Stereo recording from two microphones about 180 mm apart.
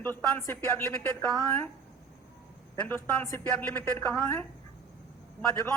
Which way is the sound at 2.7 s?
10° left (ahead or behind).